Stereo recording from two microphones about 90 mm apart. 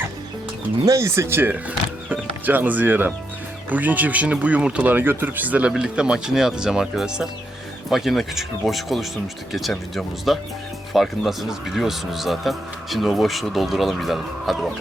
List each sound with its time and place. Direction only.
0.9 s speech: 35° right (ahead or behind); by 14.7 s centre (ahead or behind)